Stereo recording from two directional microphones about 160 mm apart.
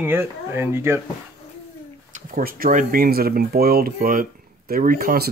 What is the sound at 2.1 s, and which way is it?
Speech, 55° right (ahead or behind).